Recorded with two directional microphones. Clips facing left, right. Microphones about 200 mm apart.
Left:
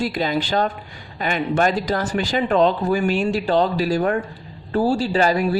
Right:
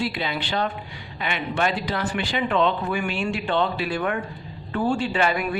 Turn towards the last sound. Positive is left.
turn(degrees=35)  # may be behind; listen again after turning